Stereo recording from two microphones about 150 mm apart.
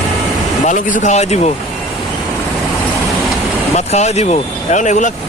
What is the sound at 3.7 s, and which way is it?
Speech, 45° left (ahead or behind).